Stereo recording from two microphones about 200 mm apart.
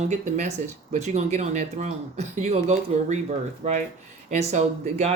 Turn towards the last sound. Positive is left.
turn(degrees=-35)  # may be behind; listen again after turning